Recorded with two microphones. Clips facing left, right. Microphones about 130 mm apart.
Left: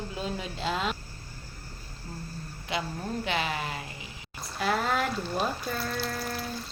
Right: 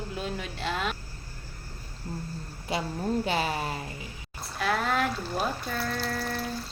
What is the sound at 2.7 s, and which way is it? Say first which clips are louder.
Speech: right 4 dB; 35° right (ahead or behind).